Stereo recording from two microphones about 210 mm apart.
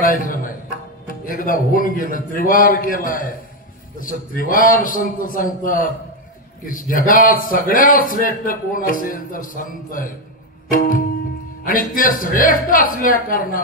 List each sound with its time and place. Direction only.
0.0 s a sound: 40° left (ahead or behind)
1.0 s a man's voice: 40° left (ahead or behind)
10.7 s music: 40° left (ahead or behind)
11.6 s a man's voice: 40° left (ahead or behind)